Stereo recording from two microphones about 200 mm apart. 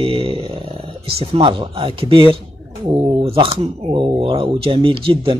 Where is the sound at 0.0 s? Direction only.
25° right (ahead or behind).